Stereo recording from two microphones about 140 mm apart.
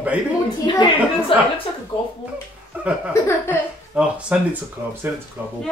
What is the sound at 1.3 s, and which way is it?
Speech, 40° left (ahead or behind).